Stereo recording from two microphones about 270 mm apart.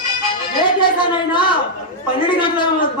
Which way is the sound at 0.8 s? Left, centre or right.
Centre.